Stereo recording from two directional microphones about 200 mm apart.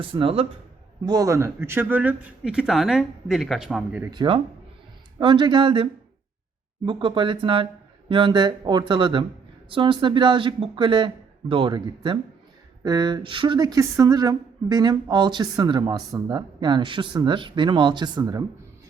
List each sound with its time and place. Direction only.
0.0 s speech: 25° right (ahead or behind); by 4.1 s 5° right (ahead or behind)
4.1 s speech: 20° right (ahead or behind)